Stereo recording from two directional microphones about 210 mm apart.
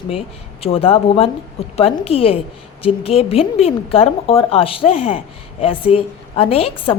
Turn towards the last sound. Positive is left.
turn(degrees=25)  # may be behind; listen again after turning